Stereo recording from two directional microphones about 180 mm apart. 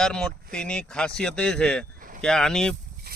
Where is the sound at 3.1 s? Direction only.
60° right (ahead or behind).